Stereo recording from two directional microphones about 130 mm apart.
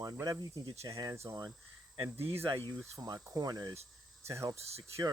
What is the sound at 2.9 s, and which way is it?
Speech, 30° right (ahead or behind).